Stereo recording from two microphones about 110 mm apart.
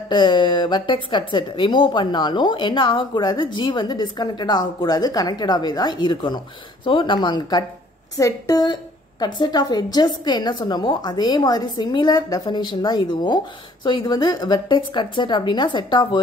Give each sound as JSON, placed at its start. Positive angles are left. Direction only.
{"t": 0.1, "sound": "a woman's voice", "side_deg": 45}